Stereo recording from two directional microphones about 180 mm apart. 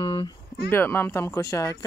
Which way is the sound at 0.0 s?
25° left (ahead or behind).